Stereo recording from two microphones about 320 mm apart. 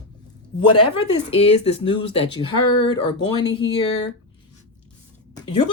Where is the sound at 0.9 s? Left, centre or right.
Centre.